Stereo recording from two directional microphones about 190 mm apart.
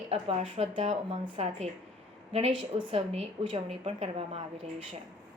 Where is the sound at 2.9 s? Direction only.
35° right (ahead or behind).